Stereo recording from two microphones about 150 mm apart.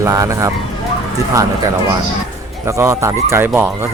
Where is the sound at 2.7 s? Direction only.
20° right (ahead or behind).